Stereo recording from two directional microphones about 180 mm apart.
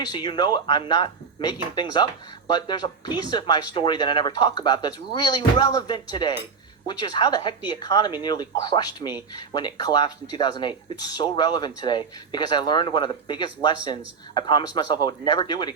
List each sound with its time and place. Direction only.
0.0 s speech: 25° left (ahead or behind)